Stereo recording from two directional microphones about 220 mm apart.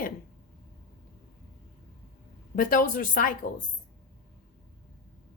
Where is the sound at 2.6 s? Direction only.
40° left (ahead or behind).